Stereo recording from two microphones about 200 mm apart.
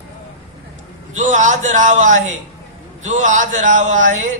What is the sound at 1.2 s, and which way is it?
A man's voice, 40° right (ahead or behind).